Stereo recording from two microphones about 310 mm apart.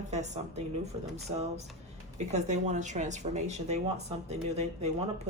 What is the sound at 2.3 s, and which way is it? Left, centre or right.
A woman's voice, right.